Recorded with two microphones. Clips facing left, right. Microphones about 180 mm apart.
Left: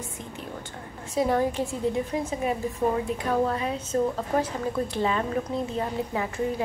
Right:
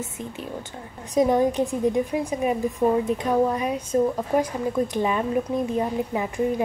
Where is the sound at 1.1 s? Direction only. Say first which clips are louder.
Right 5 dB; 20° right (ahead or behind).